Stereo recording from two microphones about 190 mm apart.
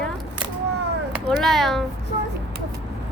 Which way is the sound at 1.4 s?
Centre (ahead or behind).